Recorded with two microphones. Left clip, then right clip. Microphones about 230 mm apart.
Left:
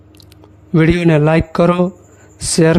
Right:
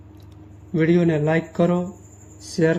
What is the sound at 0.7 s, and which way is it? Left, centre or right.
A man's voice, left.